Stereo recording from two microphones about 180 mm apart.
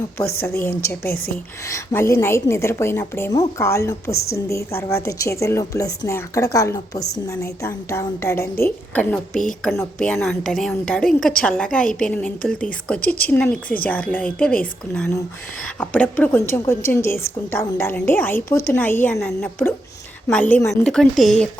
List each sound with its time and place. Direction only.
0.6 s a woman's voice: 15° left (ahead or behind)